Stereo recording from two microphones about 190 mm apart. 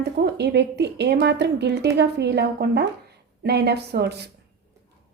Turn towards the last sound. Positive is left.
turn(degrees=-60)  # may be behind; listen again after turning